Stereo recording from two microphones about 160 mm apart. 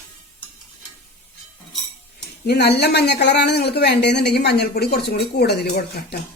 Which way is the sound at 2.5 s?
90° left.